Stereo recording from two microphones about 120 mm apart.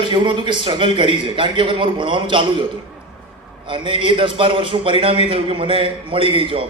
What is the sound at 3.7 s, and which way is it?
A man's voice, 45° right (ahead or behind).